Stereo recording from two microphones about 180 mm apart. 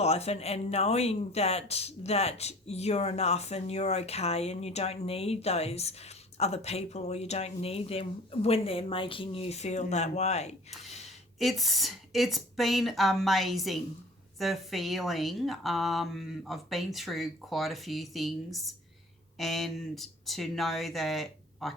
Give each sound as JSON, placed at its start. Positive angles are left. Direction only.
{"t": 0.0, "sound": "speech", "side_deg": 35}
{"t": 11.3, "sound": "a woman's voice", "side_deg": 0}